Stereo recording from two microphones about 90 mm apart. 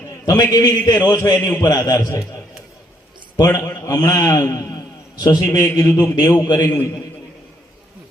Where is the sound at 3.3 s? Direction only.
35° left (ahead or behind).